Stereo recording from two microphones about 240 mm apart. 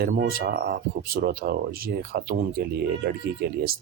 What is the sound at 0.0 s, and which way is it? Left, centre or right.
Speech, right.